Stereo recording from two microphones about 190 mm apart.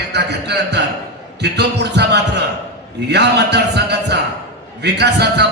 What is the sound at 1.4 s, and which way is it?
A man's voice, 60° right (ahead or behind).